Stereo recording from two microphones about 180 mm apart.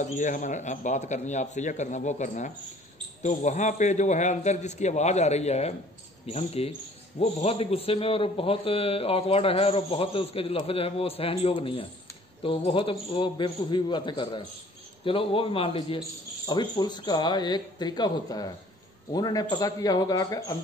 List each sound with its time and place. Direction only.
0.0 s a man's voice: 45° left (ahead or behind); by 20.5 s 20° left (ahead or behind)